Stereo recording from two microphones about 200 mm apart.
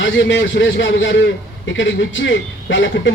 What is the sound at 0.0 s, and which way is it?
A man's voice, 65° left (ahead or behind).